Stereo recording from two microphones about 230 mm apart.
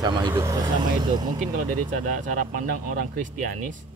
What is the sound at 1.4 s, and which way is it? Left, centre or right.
Speech, right.